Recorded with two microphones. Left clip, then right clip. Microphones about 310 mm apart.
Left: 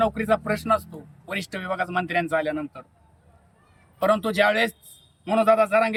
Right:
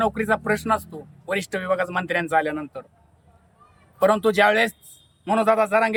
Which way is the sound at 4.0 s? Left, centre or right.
Centre.